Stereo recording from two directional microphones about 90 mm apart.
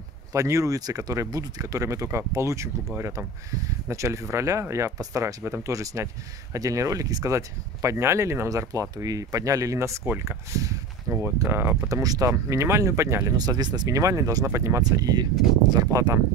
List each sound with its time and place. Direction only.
0.3 s speech: 35° right (ahead or behind)
3.9 s speech: 35° right (ahead or behind)
11.9 s speech: 40° right (ahead or behind)
13.4 s speech: 50° right (ahead or behind)
13.9 s speech: 35° right (ahead or behind)
14.8 s speech: 45° right (ahead or behind)